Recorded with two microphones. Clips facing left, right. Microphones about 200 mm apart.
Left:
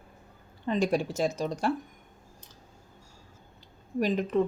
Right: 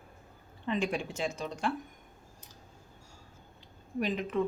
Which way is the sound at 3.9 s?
40° left (ahead or behind).